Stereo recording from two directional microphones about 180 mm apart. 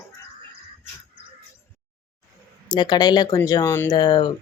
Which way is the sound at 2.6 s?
25° left (ahead or behind).